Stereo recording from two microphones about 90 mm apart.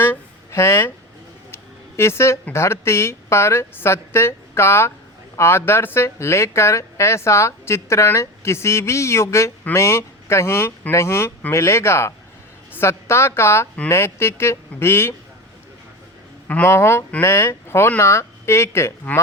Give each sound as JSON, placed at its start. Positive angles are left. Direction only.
{"t": 0.0, "sound": "a sound", "side_deg": 25}
{"t": 2.5, "sound": "a woman's voice", "side_deg": 30}
{"t": 16.6, "sound": "a woman's voice", "side_deg": 30}